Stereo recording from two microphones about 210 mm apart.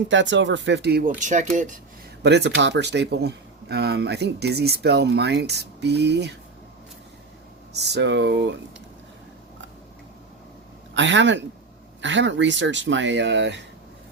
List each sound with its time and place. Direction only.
0.1 s speech: 60° right (ahead or behind); by 1.5 s 35° right (ahead or behind)
2.2 s speech: 55° right (ahead or behind)
7.7 s speech: 55° right (ahead or behind)
10.9 s speech: 60° right (ahead or behind)